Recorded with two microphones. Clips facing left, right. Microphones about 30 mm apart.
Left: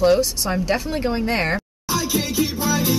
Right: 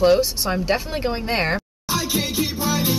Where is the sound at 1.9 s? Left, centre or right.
Right.